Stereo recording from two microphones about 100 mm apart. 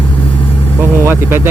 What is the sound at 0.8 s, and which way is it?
Vehicle, 25° right (ahead or behind).